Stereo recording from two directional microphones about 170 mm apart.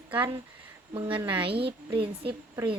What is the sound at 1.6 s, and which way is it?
Speech, 30° right (ahead or behind).